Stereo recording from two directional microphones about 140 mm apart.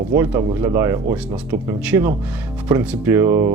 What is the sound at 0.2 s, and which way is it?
Speech, 20° right (ahead or behind).